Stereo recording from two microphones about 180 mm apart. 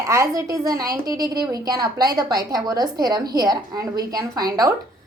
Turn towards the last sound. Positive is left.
turn(degrees=-20)  # may be behind; listen again after turning